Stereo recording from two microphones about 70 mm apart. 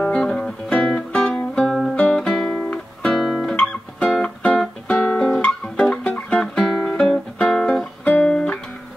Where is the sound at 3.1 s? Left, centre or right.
Centre.